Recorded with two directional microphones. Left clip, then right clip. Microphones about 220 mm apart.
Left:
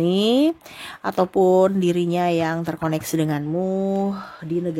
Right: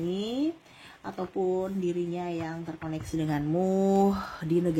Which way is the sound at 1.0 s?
45° left (ahead or behind).